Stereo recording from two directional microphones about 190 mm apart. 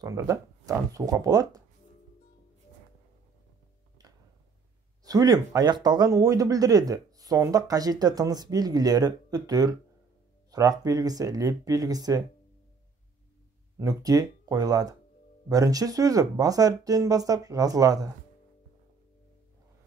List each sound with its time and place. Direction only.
0.0 s speech: 15° right (ahead or behind)
5.0 s speech: 20° right (ahead or behind)
13.7 s speech: 20° right (ahead or behind)